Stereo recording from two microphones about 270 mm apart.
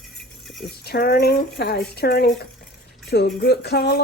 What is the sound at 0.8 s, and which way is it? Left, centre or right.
Speech, left.